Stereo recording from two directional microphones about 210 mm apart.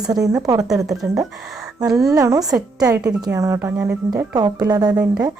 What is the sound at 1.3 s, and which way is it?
Speech, centre (ahead or behind).